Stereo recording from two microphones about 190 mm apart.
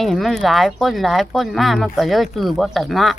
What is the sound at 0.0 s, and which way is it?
Speech, centre (ahead or behind).